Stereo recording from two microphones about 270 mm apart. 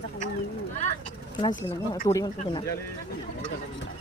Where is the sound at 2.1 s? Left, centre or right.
Centre.